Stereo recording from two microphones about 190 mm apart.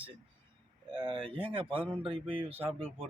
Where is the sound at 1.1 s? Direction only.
30° right (ahead or behind).